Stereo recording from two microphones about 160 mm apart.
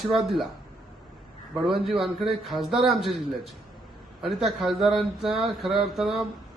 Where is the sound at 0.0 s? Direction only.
Centre (ahead or behind).